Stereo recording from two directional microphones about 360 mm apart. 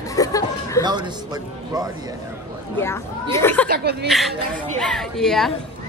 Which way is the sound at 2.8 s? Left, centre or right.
Centre.